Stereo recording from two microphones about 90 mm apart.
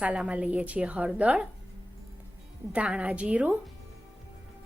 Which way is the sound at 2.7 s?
15° right (ahead or behind).